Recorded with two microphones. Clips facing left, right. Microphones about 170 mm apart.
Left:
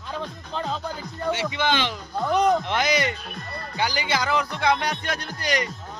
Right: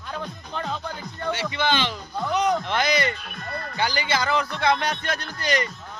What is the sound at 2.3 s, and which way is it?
Speech, 50° left (ahead or behind).